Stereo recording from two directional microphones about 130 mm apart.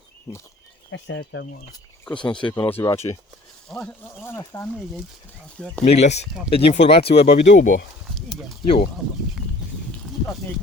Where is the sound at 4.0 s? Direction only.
20° left (ahead or behind).